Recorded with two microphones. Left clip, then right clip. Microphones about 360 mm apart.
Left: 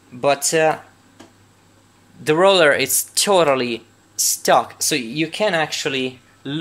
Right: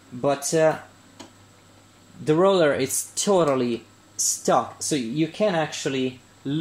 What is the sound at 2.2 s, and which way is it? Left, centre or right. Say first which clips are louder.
Speech: left 5 dB; left.